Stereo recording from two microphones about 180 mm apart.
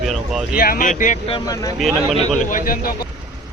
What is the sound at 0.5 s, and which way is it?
Speech, 55° left (ahead or behind).